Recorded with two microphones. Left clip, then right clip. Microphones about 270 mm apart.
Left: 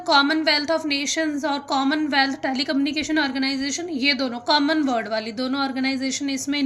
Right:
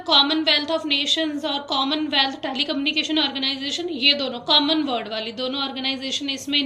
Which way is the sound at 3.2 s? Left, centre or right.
Left.